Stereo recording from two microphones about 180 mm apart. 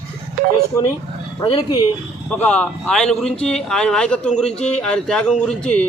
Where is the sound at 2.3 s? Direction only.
5° left (ahead or behind).